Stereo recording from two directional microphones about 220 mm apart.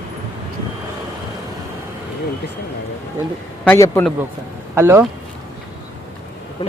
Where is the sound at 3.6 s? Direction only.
10° left (ahead or behind).